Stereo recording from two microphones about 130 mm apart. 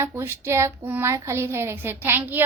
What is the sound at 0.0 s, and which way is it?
Speech, 20° right (ahead or behind).